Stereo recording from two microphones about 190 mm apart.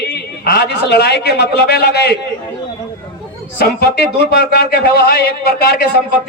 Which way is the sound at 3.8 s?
60° left (ahead or behind).